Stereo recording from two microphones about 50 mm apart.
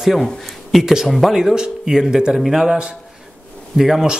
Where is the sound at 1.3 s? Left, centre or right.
Centre.